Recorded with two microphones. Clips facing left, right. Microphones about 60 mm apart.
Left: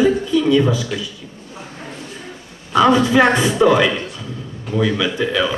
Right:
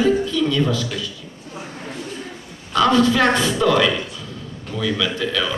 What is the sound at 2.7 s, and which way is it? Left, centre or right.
A man's voice, centre.